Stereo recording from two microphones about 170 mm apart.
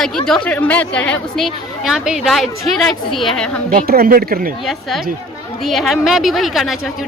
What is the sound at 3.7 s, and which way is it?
Speech, 60° right (ahead or behind).